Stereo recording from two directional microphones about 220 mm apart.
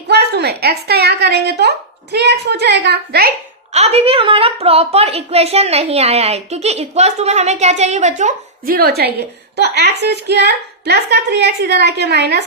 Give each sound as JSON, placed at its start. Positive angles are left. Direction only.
{"t": 0.1, "sound": "a woman's voice", "side_deg": -50}
{"t": 3.7, "sound": "a woman's voice", "side_deg": -30}